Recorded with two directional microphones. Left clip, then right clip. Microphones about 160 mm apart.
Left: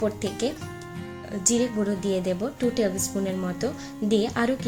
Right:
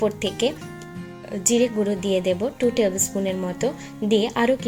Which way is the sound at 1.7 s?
5° right (ahead or behind).